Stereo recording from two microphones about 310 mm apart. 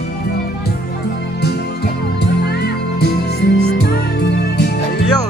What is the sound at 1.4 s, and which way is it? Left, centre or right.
Music, left.